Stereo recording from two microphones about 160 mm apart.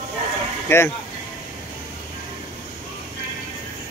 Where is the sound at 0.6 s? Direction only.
15° left (ahead or behind).